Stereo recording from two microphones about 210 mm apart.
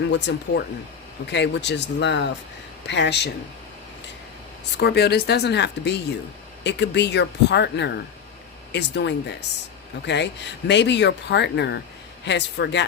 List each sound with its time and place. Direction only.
0.1 s speech: 55° left (ahead or behind)
4.8 s speech: 50° left (ahead or behind)